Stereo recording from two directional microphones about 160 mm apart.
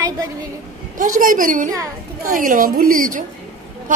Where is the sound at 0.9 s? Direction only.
55° right (ahead or behind).